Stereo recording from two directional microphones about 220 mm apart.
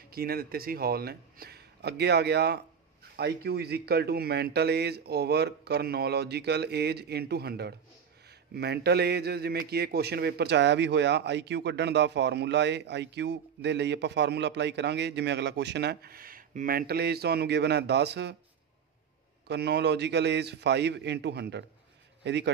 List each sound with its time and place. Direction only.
0.1 s a man's voice: 45° right (ahead or behind)
19.4 s a man's voice: 50° right (ahead or behind)